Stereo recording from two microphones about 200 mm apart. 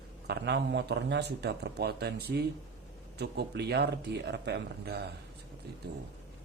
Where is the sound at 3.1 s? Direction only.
55° right (ahead or behind).